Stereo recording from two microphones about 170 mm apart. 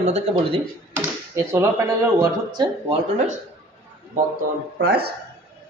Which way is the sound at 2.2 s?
25° right (ahead or behind).